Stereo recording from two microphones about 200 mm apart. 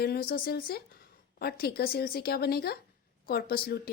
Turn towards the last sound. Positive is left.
turn(degrees=50)  # may be behind; listen again after turning